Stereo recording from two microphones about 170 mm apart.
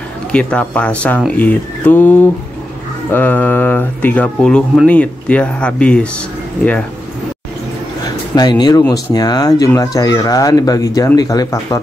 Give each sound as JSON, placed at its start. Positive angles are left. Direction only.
{"t": 0.3, "sound": "speech", "side_deg": 5}
{"t": 8.4, "sound": "speech", "side_deg": 25}